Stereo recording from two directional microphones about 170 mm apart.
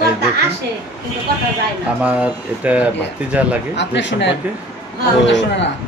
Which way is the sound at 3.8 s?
90° left.